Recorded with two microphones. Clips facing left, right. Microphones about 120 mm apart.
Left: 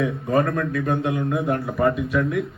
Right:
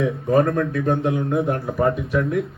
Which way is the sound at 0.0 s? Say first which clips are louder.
Right 3 dB; 25° right (ahead or behind).